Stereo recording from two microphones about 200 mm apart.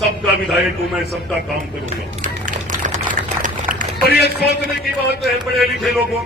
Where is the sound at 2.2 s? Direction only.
40° right (ahead or behind).